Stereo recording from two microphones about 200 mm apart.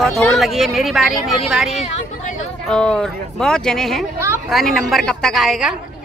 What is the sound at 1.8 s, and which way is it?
Speech, 35° left (ahead or behind).